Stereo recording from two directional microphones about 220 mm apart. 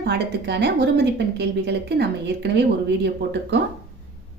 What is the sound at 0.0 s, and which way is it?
A woman's voice, 50° right (ahead or behind).